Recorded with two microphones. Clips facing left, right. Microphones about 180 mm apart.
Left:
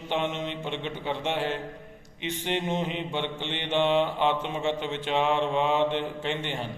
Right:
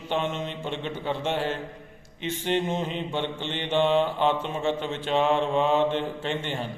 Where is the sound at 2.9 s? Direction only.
40° right (ahead or behind).